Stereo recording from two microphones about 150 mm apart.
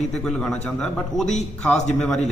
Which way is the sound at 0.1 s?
5° left (ahead or behind).